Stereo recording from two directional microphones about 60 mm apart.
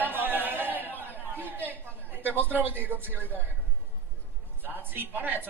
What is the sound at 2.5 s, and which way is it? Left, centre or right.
Speech, right.